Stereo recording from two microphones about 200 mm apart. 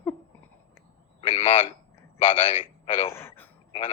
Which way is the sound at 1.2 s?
25° left (ahead or behind).